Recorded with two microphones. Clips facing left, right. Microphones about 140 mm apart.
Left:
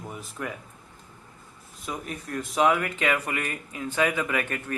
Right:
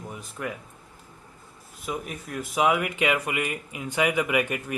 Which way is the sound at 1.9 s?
5° right (ahead or behind).